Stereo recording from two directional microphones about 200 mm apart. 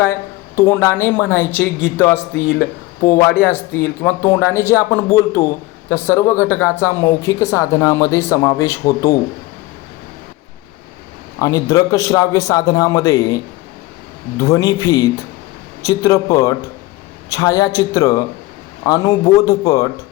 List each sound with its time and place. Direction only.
0.0 s speech: 15° left (ahead or behind)
2.3 s speech: 50° left (ahead or behind)
3.0 s speech: 15° left (ahead or behind)
11.3 s a woman's voice: 20° left (ahead or behind)